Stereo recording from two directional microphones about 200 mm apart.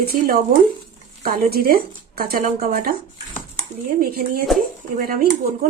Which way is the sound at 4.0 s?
45° right (ahead or behind).